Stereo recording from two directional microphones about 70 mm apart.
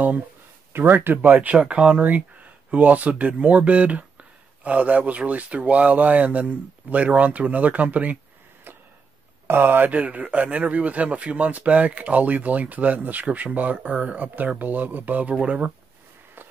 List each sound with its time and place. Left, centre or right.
0.7 s speech: right
8.7 s chop: right
9.5 s speech: right
16.4 s walk: right